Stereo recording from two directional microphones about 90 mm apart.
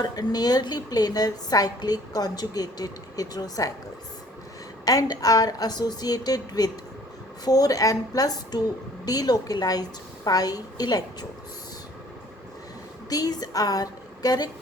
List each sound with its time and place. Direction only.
0.0 s a woman's voice: 45° left (ahead or behind)
4.9 s a woman's voice: 45° left (ahead or behind)
13.1 s a woman's voice: 45° left (ahead or behind)